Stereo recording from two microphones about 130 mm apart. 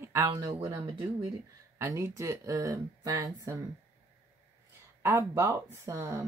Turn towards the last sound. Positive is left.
turn(degrees=-25)  # may be behind; listen again after turning